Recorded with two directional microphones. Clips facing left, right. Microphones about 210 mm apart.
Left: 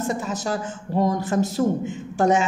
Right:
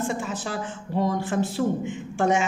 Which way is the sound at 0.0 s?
40° left (ahead or behind).